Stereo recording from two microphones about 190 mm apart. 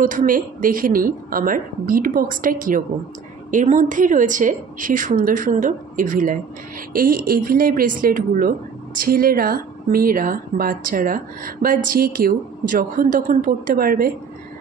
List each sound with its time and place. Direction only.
0.0 s a woman's voice: 45° right (ahead or behind)